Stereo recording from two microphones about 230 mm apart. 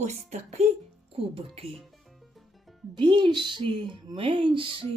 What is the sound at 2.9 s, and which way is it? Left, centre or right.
A woman's voice, centre.